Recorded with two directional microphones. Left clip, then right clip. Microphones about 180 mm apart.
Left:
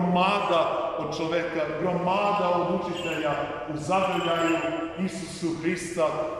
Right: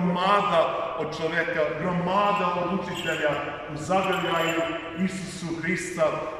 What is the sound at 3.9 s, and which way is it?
Mantra, 15° left (ahead or behind).